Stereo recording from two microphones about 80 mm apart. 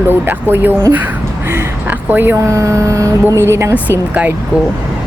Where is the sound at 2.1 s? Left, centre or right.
Right.